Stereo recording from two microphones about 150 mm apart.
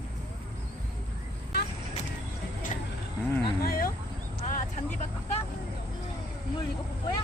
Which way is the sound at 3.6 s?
85° left.